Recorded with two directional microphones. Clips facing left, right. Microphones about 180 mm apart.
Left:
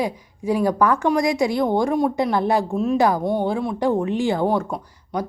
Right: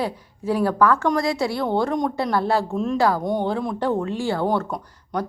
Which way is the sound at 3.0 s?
20° left (ahead or behind).